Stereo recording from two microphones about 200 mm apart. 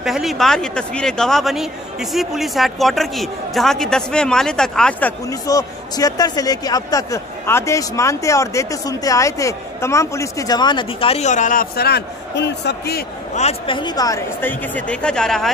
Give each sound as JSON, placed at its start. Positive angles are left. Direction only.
{"t": 0.0, "sound": "speech", "side_deg": 0}
{"t": 5.3, "sound": "speech", "side_deg": 15}
{"t": 13.3, "sound": "speech", "side_deg": 30}